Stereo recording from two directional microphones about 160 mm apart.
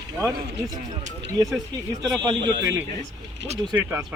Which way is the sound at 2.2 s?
25° right (ahead or behind).